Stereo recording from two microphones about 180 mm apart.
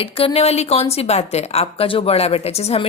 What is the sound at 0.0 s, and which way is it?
A woman's voice, 30° left (ahead or behind).